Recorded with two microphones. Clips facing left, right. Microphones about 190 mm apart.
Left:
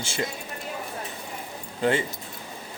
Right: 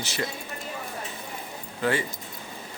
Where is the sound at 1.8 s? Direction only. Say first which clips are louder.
Left 2 dB; 25° left (ahead or behind).